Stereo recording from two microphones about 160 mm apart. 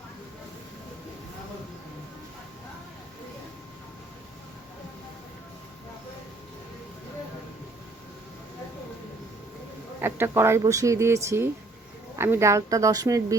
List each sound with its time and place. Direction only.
10.0 s a woman's voice: 15° right (ahead or behind)